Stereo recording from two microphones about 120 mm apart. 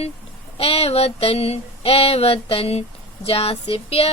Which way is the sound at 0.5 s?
55° left (ahead or behind).